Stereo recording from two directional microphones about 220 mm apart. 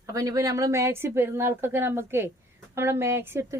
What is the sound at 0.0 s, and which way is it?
Speech, 15° right (ahead or behind).